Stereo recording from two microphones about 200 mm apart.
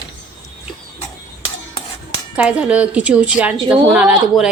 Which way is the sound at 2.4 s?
5° right (ahead or behind).